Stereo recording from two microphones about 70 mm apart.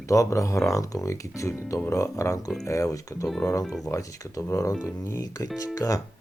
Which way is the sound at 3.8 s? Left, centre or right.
Left.